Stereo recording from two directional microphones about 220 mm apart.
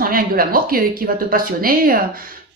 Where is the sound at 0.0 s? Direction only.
40° right (ahead or behind).